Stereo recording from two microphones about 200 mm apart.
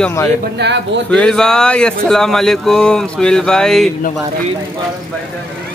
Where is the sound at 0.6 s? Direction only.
55° right (ahead or behind).